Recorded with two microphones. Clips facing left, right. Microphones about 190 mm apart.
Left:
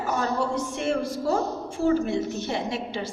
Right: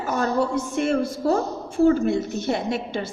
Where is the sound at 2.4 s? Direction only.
50° right (ahead or behind).